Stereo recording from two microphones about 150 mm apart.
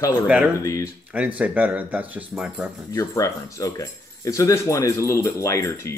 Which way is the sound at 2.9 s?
20° left (ahead or behind).